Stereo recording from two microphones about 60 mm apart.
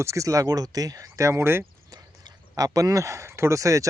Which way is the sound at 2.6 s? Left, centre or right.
Right.